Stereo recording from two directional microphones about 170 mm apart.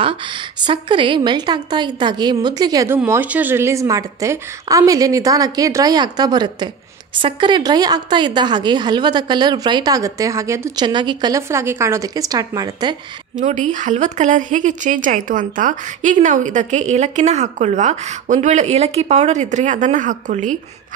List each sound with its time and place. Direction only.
0.0 s a woman's voice: 30° right (ahead or behind)
3.1 s a woman's voice: 10° right (ahead or behind)
13.4 s a woman's voice: 45° right (ahead or behind)